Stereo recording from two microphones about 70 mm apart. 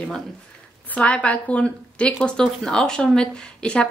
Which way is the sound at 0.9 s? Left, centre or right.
Centre.